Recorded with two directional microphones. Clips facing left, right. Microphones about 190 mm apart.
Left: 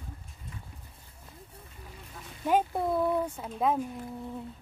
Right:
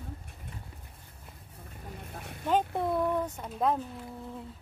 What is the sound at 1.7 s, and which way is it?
Vehicle, 55° right (ahead or behind).